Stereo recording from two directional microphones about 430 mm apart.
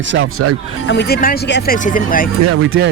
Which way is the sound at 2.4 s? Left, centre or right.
Right.